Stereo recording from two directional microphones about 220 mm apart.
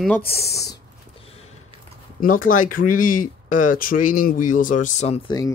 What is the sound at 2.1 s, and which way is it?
Speech, 40° left (ahead or behind).